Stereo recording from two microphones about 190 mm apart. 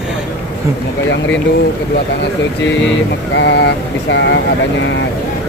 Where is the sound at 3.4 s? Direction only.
65° left (ahead or behind).